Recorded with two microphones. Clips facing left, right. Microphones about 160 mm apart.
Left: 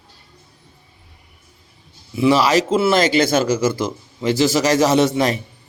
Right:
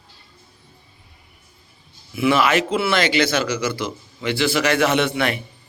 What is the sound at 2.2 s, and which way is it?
Speech, 35° left (ahead or behind).